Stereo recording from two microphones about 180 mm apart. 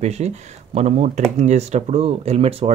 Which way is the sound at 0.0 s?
40° right (ahead or behind).